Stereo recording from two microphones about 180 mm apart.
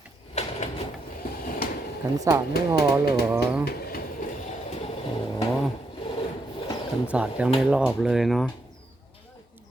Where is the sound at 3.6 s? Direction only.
55° left (ahead or behind).